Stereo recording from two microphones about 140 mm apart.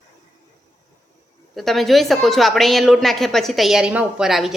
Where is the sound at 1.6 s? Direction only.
Centre (ahead or behind).